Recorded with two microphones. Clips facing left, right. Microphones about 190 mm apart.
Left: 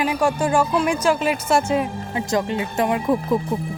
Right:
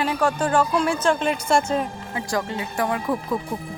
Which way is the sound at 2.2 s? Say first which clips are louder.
Left 4 dB; 20° left (ahead or behind).